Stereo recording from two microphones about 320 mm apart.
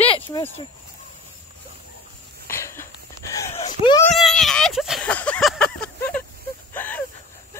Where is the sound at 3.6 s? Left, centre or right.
Left.